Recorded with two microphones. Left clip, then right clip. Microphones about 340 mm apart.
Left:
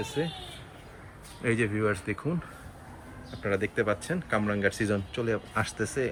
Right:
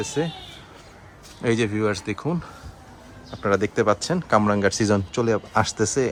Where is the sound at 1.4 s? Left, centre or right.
Centre.